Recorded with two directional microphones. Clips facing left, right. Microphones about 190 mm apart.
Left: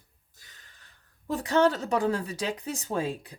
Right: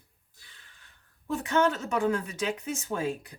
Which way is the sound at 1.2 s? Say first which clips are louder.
Left 2 dB; 35° left (ahead or behind).